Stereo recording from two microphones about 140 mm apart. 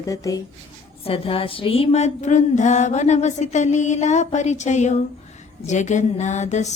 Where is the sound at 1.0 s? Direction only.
40° left (ahead or behind).